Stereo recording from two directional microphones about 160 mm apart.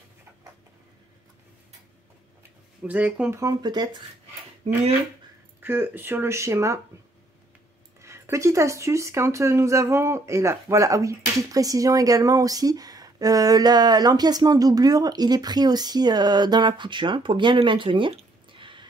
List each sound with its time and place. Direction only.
2.8 s speech: 5° right (ahead or behind)
3.3 s speech: 25° right (ahead or behind)
5.6 s speech: 15° right (ahead or behind)
8.0 s speech: 20° right (ahead or behind)